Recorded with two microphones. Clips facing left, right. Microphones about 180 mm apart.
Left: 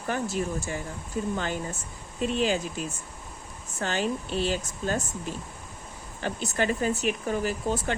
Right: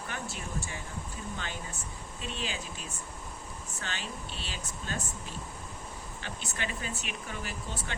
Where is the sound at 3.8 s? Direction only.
45° left (ahead or behind).